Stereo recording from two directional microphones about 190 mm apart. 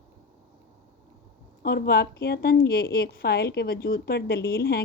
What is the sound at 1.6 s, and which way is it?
A woman's voice, 55° left (ahead or behind).